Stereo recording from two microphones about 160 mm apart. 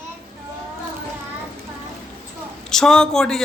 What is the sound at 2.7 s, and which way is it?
Speech, 5° left (ahead or behind).